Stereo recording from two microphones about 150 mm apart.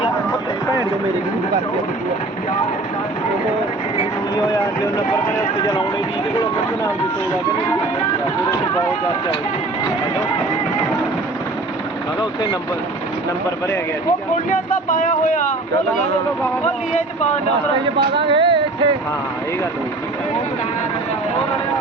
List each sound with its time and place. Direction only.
3.9 s vehicle: 25° left (ahead or behind)
14.5 s speech: 60° left (ahead or behind)
18.2 s speech: 35° right (ahead or behind)